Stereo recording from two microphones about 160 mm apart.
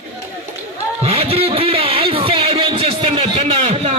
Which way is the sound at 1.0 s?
40° right (ahead or behind).